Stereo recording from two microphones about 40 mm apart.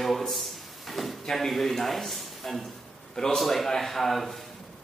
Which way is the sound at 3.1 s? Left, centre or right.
Centre.